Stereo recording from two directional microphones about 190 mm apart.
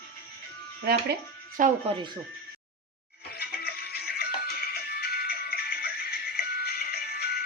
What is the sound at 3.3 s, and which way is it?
Music, 55° left (ahead or behind).